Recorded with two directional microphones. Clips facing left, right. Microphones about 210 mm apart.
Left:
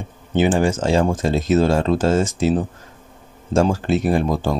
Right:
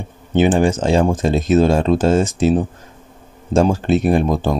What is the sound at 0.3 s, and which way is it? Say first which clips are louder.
Speech: right 3 dB; 20° right (ahead or behind).